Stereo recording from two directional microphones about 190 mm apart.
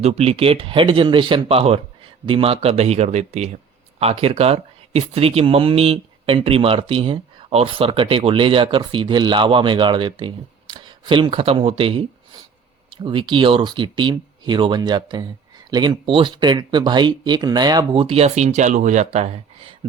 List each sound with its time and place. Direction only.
0.0 s speech: 30° right (ahead or behind)